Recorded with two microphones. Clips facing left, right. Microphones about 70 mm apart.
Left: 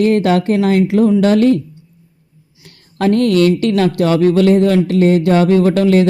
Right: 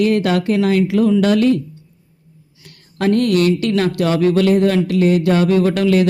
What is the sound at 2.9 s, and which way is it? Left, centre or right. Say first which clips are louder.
Speech: left 3 dB; left.